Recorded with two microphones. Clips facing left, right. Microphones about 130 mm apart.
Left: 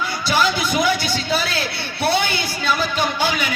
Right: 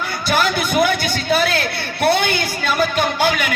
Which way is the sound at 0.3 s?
55° right (ahead or behind).